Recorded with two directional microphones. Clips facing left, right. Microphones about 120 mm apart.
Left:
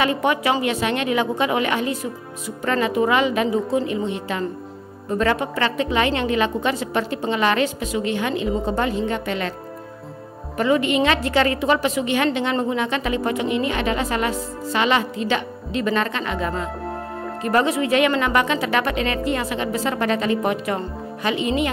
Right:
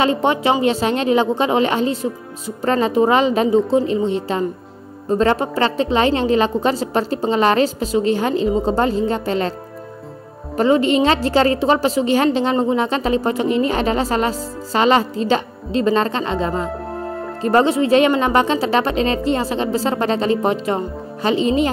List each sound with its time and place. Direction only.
0.0 s a woman's voice: 30° right (ahead or behind)
10.6 s a woman's voice: 30° right (ahead or behind)